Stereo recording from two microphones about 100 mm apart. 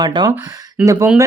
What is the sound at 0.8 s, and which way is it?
Speech, 30° right (ahead or behind).